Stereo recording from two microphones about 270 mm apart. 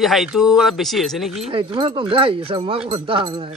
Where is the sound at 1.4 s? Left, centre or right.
Centre.